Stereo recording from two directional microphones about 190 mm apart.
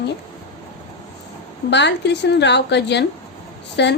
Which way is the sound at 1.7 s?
65° left (ahead or behind).